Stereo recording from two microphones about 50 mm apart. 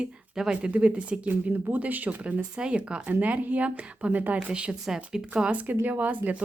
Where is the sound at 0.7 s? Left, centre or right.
Right.